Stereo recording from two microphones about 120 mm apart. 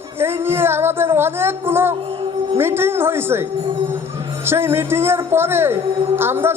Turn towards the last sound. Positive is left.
turn(degrees=-20)  # may be behind; listen again after turning